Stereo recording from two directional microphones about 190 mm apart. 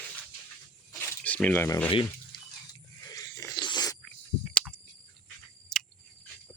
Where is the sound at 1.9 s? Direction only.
25° left (ahead or behind).